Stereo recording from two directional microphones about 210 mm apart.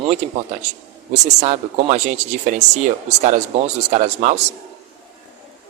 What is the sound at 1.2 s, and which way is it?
Speech, 30° right (ahead or behind).